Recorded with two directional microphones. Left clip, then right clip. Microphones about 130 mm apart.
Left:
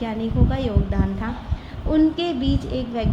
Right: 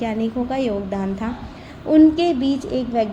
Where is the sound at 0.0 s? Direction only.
40° right (ahead or behind).